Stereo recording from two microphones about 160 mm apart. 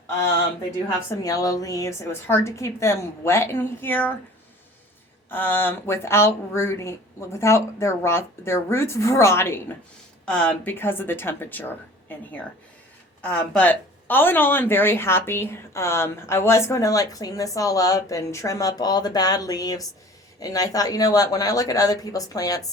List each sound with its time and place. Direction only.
1.1 s speech: 20° left (ahead or behind)
5.3 s speech: 15° left (ahead or behind)